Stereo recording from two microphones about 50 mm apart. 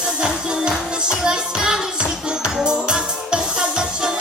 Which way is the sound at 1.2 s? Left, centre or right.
Centre.